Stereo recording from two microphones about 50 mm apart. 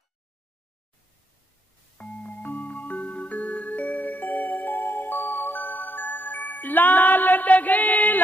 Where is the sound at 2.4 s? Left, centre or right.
Left.